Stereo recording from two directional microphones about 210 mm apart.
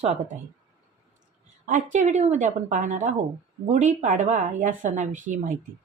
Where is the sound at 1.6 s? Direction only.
35° right (ahead or behind).